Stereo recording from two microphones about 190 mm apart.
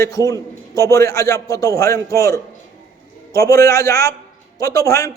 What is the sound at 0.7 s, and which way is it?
A man's voice, 15° left (ahead or behind).